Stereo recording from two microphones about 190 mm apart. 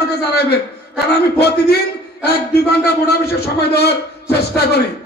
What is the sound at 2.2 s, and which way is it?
A man's voice, 55° left (ahead or behind).